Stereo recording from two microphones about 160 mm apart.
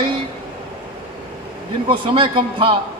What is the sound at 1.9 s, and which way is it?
Speech, 30° right (ahead or behind).